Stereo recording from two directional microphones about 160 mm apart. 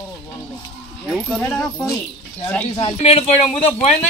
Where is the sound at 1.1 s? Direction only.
Centre (ahead or behind).